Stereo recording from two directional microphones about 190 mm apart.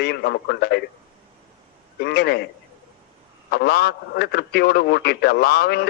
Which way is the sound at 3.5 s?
60° left (ahead or behind).